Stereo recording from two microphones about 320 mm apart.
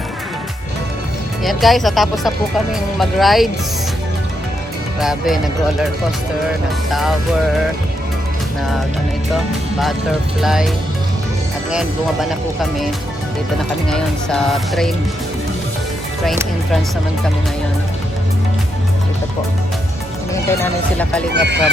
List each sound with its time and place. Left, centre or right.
1.5 s music: centre
4.9 s music: centre
6.9 s music: centre
10.4 s music: centre
11.7 s music: centre
13.9 s music: centre
16.2 s music: centre
20.5 s music: centre
21.3 s speech: right